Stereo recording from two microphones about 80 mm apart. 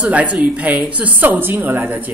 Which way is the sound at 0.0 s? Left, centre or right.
Centre.